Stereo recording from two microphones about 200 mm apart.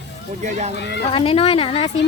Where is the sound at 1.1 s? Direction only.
25° left (ahead or behind).